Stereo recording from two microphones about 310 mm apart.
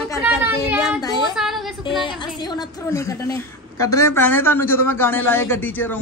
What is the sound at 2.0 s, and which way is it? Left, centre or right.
A woman's voice, centre.